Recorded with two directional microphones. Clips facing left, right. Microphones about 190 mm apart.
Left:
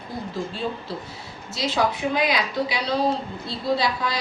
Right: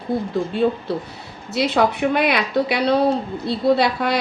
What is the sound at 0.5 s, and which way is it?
A woman's voice, 60° right (ahead or behind).